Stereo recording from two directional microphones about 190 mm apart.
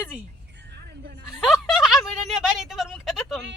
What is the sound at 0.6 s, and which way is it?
Vehicle, 60° right (ahead or behind).